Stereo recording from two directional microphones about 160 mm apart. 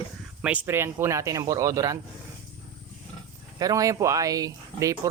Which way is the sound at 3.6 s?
20° right (ahead or behind).